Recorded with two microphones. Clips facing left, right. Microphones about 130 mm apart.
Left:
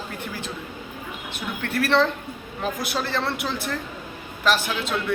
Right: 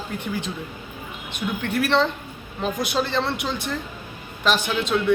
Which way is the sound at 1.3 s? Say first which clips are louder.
Right 3 dB; 15° right (ahead or behind).